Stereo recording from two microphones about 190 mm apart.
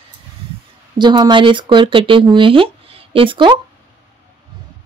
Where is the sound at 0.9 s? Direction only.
25° right (ahead or behind).